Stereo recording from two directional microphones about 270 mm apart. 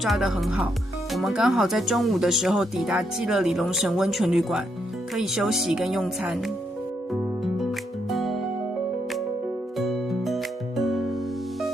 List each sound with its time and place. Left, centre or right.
0.0 s speech: centre
7.1 s music: centre
9.7 s music: centre